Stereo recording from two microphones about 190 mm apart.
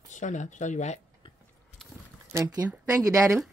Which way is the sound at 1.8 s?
Centre (ahead or behind).